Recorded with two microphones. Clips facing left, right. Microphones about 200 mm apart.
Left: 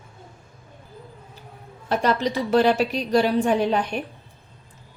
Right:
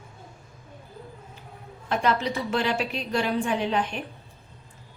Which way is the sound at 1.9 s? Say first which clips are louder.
Left 3 dB; 35° left (ahead or behind).